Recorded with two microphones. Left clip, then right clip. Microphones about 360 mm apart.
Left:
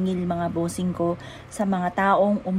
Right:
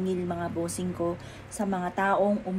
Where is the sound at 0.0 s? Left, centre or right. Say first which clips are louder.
Left 4 dB; left.